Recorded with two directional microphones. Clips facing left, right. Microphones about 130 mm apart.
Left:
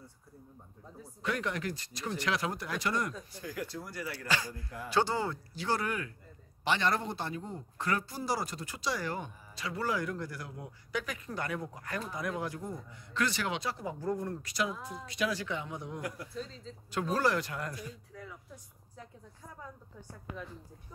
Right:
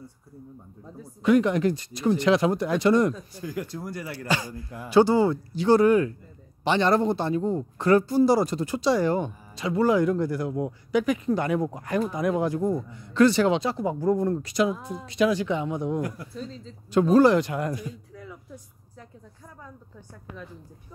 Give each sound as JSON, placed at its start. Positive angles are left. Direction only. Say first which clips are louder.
{"t": 1.2, "sound": "a man's voice", "louder": "right 14 dB", "side_deg": -20}
{"t": 17.1, "sound": "a man's voice", "louder": "right 12 dB", "side_deg": -20}